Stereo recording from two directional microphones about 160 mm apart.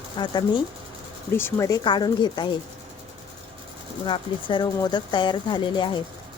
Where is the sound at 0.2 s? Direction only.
30° left (ahead or behind).